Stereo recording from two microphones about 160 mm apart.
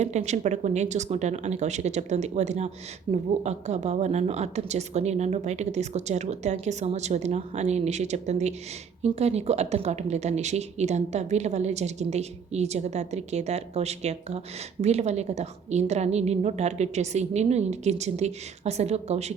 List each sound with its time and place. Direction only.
0.0 s speech: 45° right (ahead or behind)